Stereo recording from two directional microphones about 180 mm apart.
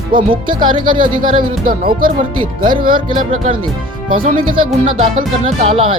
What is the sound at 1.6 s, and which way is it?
Speech, 55° right (ahead or behind).